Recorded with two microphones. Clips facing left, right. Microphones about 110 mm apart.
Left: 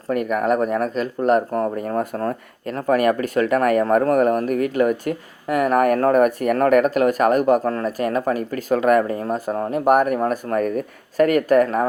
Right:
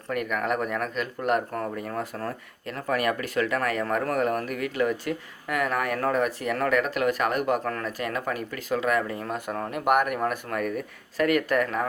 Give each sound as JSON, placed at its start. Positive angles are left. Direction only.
{"t": 0.1, "sound": "speech", "side_deg": 40}